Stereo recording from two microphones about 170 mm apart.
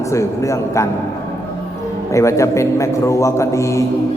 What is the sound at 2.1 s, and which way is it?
A man's voice, 20° left (ahead or behind).